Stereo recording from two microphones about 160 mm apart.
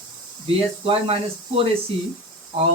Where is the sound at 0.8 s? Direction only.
35° right (ahead or behind).